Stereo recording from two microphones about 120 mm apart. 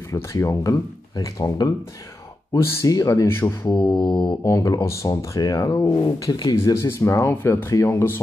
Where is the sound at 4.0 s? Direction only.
40° left (ahead or behind).